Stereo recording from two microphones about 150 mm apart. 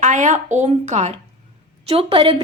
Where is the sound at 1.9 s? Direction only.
40° right (ahead or behind).